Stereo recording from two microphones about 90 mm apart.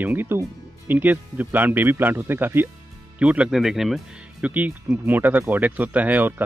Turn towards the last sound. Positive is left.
turn(degrees=-20)  # may be behind; listen again after turning